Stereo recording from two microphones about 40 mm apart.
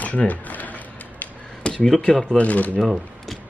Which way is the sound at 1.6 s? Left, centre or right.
Left.